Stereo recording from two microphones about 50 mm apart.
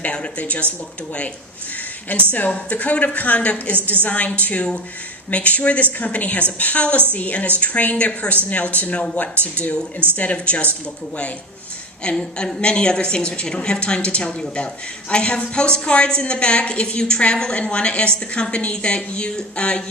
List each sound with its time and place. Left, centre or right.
0.0 s a woman's voice: left
2.1 s a woman's voice: left
12.0 s a woman's voice: centre